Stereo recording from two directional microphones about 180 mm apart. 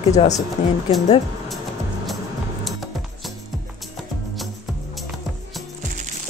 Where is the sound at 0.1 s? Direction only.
40° left (ahead or behind).